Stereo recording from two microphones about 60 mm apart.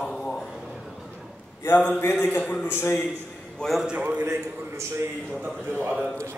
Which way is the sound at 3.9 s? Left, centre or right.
Right.